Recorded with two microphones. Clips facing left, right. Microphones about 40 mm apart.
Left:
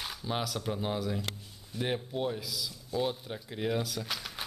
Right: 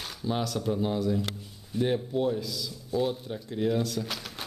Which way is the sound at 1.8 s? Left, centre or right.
Centre.